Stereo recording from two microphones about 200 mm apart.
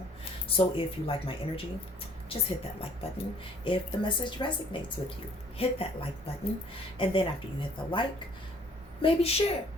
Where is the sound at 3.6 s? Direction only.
25° left (ahead or behind).